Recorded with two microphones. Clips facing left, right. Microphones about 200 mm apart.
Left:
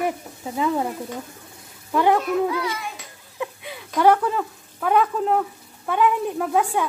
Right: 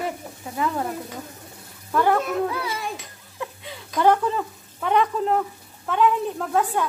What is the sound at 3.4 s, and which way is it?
Speech, 15° left (ahead or behind).